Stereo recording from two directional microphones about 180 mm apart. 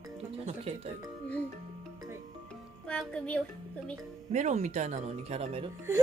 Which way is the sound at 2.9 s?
5° left (ahead or behind).